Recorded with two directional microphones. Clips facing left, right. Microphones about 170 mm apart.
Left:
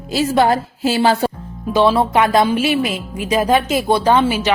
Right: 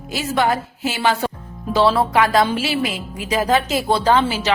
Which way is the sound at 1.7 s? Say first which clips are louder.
Left 2 dB; 20° left (ahead or behind).